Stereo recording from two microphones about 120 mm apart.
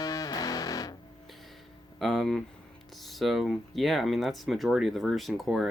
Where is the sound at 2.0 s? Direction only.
5° left (ahead or behind).